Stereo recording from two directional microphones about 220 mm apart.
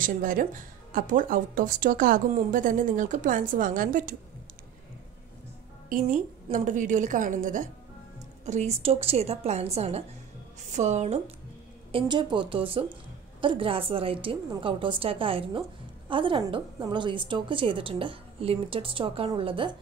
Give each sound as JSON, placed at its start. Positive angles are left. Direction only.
{"t": 0.0, "sound": "a woman's voice", "side_deg": -40}
{"t": 5.9, "sound": "a woman's voice", "side_deg": -35}